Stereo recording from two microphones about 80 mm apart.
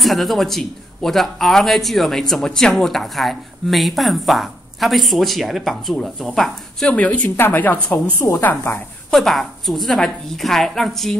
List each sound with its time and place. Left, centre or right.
0.0 s speech: centre
6.9 s a woman's voice: centre
7.2 s speech: left
9.1 s speech: centre